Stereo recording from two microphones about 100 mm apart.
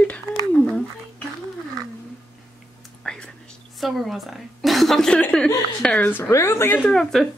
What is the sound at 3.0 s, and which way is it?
Whispering, 5° left (ahead or behind).